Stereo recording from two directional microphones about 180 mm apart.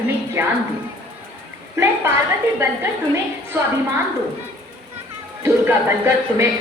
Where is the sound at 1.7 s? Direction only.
15° right (ahead or behind).